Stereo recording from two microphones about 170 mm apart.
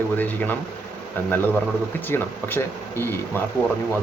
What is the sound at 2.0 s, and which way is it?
Speech, 15° left (ahead or behind).